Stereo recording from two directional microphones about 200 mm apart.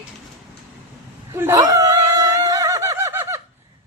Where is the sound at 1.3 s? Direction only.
15° right (ahead or behind).